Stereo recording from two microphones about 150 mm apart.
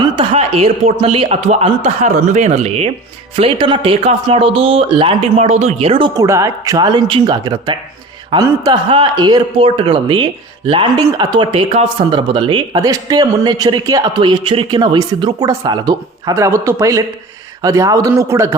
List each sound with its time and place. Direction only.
0.0 s speech: 40° right (ahead or behind)
6.1 s speech: 20° right (ahead or behind)